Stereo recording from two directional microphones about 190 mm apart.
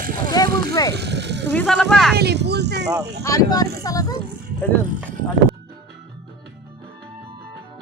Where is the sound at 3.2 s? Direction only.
20° left (ahead or behind).